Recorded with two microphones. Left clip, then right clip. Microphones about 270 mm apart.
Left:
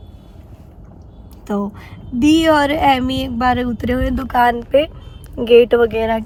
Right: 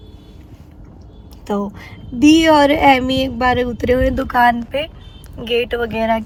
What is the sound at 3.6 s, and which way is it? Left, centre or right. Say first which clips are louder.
Speech: right 4 dB; right.